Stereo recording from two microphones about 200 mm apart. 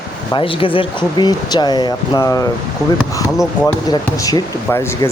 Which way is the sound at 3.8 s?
20° left (ahead or behind).